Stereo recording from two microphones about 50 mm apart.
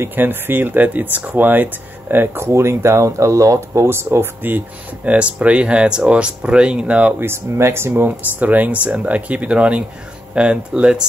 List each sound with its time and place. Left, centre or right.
0.1 s speech: right
2.3 s speech: right
4.4 s speech: right
7.2 s speech: right
8.4 s speech: right